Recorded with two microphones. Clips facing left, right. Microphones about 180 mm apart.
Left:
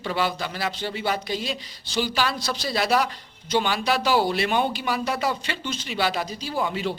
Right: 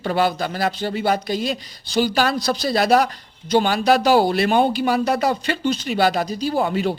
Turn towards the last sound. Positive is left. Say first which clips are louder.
# right 6 dB
turn(degrees=-45)  # may be behind; listen again after turning